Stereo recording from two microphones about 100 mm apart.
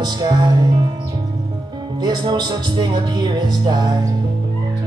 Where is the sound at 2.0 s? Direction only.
45° right (ahead or behind).